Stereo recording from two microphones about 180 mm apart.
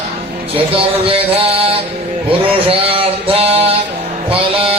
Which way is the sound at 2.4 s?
30° right (ahead or behind).